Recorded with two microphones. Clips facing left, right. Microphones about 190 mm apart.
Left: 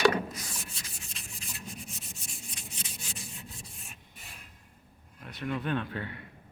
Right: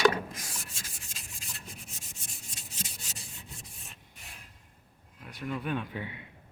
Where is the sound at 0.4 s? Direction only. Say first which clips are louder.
Left 1 dB; 45° right (ahead or behind).